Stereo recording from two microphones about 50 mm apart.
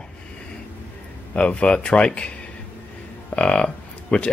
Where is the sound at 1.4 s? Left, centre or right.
Left.